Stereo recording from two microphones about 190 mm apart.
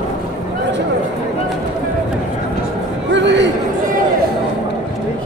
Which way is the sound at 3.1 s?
65° right (ahead or behind).